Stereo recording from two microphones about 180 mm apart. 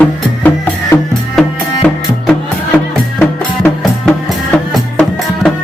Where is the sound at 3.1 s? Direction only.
5° left (ahead or behind).